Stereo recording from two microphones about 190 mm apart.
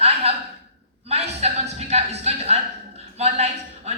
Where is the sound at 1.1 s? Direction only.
35° right (ahead or behind).